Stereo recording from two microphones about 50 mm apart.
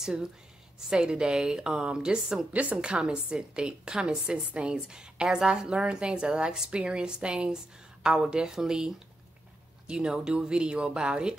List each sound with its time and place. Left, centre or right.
0.0 s a woman's voice: centre
2.5 s a woman's voice: right